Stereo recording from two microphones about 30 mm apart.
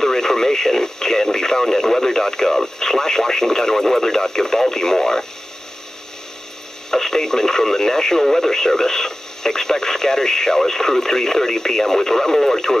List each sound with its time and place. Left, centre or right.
0.0 s speech: centre
6.9 s speech: centre